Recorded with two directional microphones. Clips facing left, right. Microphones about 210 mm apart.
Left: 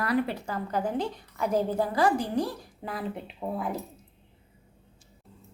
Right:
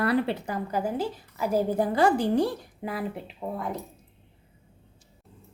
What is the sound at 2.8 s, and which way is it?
Speech, 5° right (ahead or behind).